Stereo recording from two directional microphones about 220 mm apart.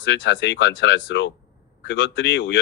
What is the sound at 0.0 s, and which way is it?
Speech, 55° left (ahead or behind).